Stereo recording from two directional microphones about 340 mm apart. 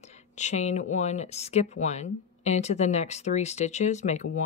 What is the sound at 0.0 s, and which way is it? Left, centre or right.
Speech, centre.